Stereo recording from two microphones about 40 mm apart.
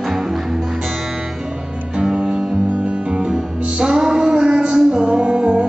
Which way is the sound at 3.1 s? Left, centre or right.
Centre.